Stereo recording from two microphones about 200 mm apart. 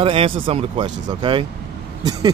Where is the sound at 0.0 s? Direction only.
30° right (ahead or behind).